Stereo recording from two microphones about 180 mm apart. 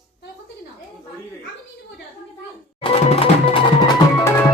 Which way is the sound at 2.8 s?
35° left (ahead or behind).